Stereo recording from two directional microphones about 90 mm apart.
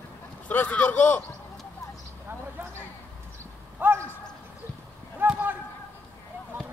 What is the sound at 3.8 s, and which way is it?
Speech, 20° right (ahead or behind).